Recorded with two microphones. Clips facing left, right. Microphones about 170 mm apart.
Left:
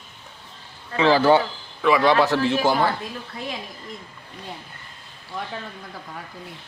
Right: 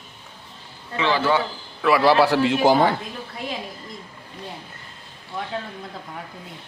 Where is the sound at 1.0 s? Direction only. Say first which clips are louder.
Left 5 dB; 35° left (ahead or behind).